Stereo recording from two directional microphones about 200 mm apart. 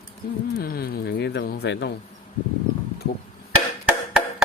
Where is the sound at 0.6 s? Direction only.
50° left (ahead or behind).